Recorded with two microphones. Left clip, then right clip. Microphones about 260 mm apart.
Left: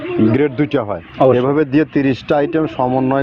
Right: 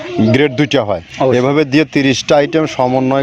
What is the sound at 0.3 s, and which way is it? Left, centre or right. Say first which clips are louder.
Speech: right 5 dB; right.